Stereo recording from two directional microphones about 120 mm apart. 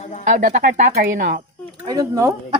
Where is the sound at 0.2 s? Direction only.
90° right.